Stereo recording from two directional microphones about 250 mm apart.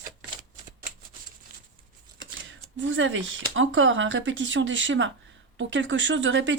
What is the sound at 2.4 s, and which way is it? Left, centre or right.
Speech, right.